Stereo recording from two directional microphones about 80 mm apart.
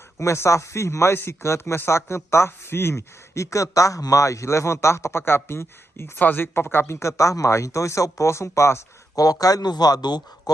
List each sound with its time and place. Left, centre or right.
0.2 s speech: left
9.1 s speech: left